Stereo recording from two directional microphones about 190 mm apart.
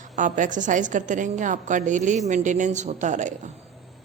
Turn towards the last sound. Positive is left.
turn(degrees=-40)  # may be behind; listen again after turning